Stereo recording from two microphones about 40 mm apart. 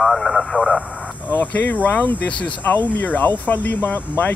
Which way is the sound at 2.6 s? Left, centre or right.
Left.